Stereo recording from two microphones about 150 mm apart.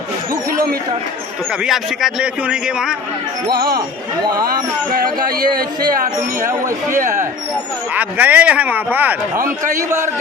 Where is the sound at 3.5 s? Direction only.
90° right.